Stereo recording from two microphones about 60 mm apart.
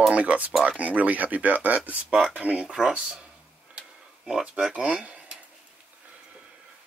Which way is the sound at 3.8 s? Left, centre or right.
Centre.